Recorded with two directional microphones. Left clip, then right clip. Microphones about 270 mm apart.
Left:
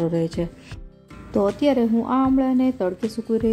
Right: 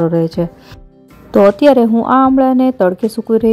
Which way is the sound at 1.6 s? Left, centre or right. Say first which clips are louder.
Right 11 dB; right.